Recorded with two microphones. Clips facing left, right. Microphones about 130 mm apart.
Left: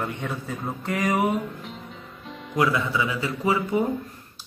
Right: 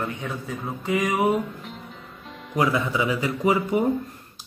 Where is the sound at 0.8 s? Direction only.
Centre (ahead or behind).